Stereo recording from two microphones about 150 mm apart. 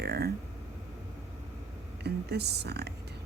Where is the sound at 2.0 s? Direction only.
90° right.